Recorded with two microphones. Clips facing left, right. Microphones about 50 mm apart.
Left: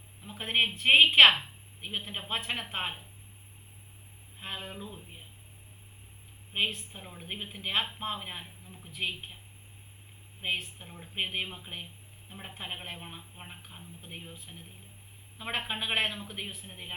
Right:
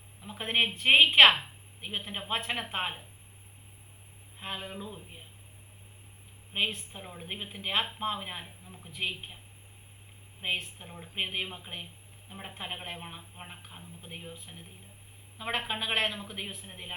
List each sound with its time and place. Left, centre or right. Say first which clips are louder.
0.2 s a woman's voice: even; centre
4.4 s a man's voice: right 1 dB; centre
6.5 s a man's voice: even; centre
10.4 s a man's voice: even; centre